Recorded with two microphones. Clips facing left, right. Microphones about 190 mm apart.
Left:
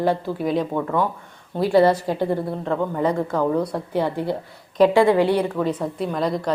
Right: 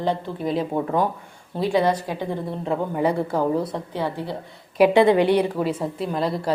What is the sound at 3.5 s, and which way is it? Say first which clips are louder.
Speech: left 2 dB; centre (ahead or behind).